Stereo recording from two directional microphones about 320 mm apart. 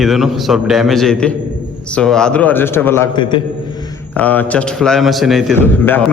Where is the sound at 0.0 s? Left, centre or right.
Centre.